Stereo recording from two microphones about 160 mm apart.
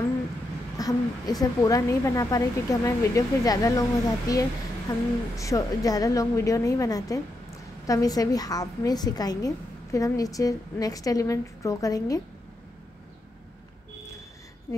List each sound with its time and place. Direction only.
0.7 s a woman's voice: 25° left (ahead or behind)